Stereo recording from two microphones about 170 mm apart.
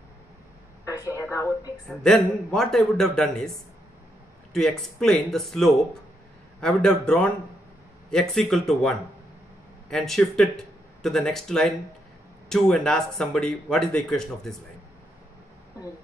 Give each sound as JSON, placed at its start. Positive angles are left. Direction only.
{"t": 0.8, "sound": "a sound", "side_deg": 20}
{"t": 1.3, "sound": "a woman's voice", "side_deg": 15}
{"t": 2.0, "sound": "speech", "side_deg": 5}
{"t": 4.6, "sound": "speech", "side_deg": 5}